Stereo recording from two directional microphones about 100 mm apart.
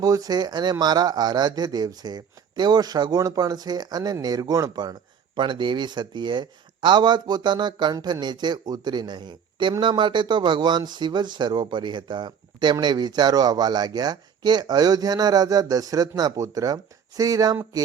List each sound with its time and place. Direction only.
0.0 s speech: 40° right (ahead or behind)